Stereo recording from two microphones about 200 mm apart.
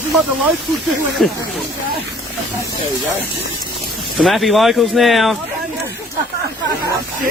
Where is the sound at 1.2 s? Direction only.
Centre (ahead or behind).